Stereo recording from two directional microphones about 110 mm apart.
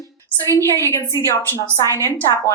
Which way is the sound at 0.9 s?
30° left (ahead or behind).